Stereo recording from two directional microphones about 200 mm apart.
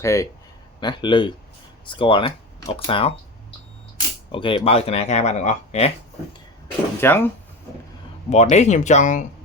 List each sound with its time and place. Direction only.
0.0 s speech: 15° left (ahead or behind)
4.3 s speech: 25° left (ahead or behind)
7.0 s speech: 10° left (ahead or behind)
8.3 s speech: 35° left (ahead or behind)